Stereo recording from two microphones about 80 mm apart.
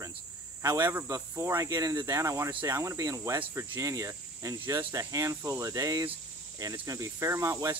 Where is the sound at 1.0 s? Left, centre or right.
Right.